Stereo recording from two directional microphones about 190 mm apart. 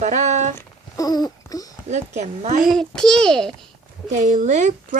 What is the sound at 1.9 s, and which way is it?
Speech, 40° right (ahead or behind).